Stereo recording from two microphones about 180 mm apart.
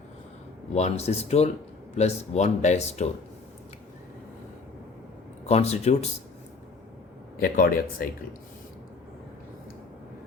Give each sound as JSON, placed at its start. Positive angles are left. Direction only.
{"t": 0.8, "sound": "speech", "side_deg": 35}
{"t": 5.5, "sound": "speech", "side_deg": 35}
{"t": 7.3, "sound": "speech", "side_deg": 50}